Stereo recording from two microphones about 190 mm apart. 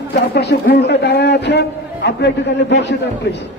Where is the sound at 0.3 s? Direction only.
60° left (ahead or behind).